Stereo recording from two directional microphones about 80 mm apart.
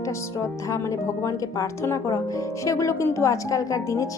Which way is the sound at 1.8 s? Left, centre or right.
Left.